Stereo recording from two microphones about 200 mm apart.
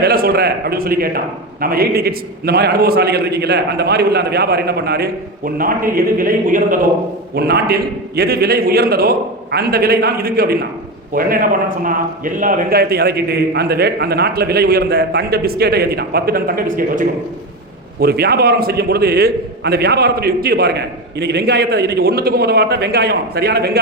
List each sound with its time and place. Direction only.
0.0 s a man's voice: 50° right (ahead or behind)
7.3 s a man's voice: 55° right (ahead or behind)